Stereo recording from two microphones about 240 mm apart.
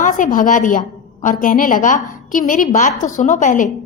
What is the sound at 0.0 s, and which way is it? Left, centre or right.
A woman's voice, left.